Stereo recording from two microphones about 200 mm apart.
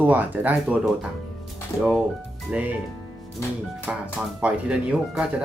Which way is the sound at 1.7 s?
15° left (ahead or behind).